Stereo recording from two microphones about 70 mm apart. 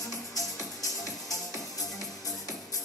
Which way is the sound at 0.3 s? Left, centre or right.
Left.